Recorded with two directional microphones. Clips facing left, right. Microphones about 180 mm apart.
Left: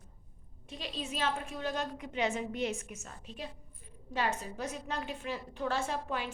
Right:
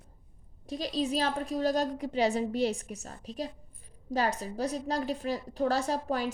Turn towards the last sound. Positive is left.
turn(degrees=-40)  # may be behind; listen again after turning